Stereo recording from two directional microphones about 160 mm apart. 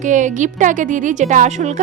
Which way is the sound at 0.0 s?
50° right (ahead or behind).